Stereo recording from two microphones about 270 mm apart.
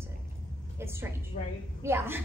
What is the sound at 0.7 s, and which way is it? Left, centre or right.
Speech, centre.